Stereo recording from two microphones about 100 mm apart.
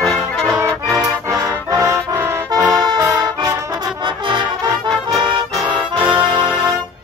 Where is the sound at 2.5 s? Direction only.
40° right (ahead or behind).